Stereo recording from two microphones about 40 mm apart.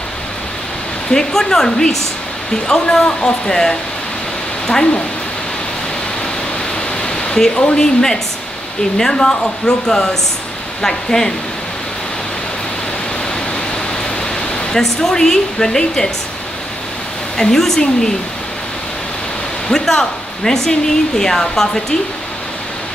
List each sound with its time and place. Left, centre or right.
1.1 s speech: centre
7.0 s pink noise: centre
7.5 s speech: left
14.7 s speech: centre
17.4 s speech: centre
19.7 s speech: centre